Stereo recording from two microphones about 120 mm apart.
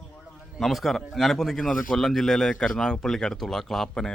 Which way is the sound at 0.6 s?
Centre (ahead or behind).